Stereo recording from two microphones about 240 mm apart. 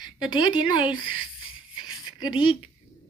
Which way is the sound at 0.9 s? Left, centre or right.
Centre.